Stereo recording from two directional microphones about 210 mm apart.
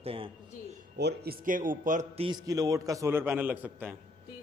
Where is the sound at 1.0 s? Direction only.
50° right (ahead or behind).